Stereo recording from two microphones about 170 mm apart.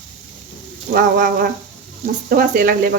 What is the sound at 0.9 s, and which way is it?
Speech, 55° right (ahead or behind).